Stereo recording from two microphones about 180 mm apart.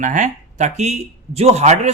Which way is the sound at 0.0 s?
45° right (ahead or behind).